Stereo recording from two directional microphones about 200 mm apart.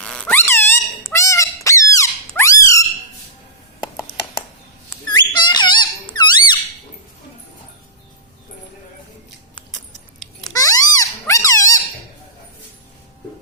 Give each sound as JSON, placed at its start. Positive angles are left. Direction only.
{"t": 0.0, "sound": "squeak", "side_deg": 5}
{"t": 5.0, "sound": "squeak", "side_deg": 20}
{"t": 10.5, "sound": "a sound", "side_deg": 15}